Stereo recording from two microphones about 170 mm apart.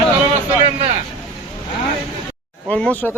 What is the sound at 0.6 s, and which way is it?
Vehicle, 35° right (ahead or behind).